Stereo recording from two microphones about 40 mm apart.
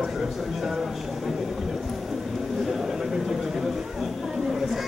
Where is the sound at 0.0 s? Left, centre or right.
Centre.